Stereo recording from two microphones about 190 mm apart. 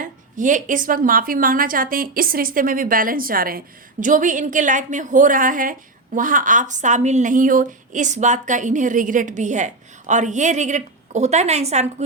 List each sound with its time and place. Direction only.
0.0 s a woman's voice: 40° right (ahead or behind)